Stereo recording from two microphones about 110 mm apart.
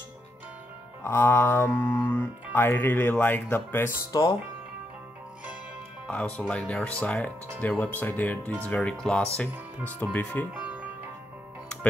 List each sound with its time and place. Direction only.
1.0 s speech: 20° left (ahead or behind)
4.1 s speech: 35° left (ahead or behind)
6.0 s speech: 10° left (ahead or behind)
10.5 s music: 10° right (ahead or behind)